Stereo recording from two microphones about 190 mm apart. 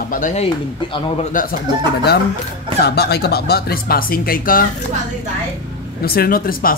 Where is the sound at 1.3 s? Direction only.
50° left (ahead or behind).